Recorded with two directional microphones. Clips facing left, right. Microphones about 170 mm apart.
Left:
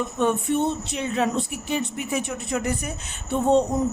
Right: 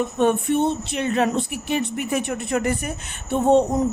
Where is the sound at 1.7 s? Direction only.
60° right (ahead or behind).